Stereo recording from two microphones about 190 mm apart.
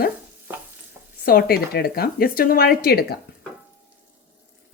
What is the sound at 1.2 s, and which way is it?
Speech, 50° left (ahead or behind).